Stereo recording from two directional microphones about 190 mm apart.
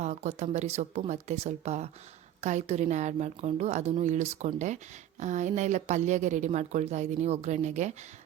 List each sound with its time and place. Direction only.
0.0 s speech: 35° right (ahead or behind)